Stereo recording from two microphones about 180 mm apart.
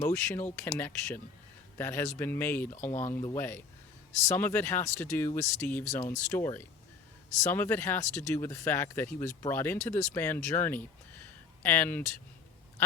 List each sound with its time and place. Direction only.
0.0 s speech: 15° left (ahead or behind)
2.9 s speech: 40° left (ahead or behind)
3.2 s speech: 15° left (ahead or behind)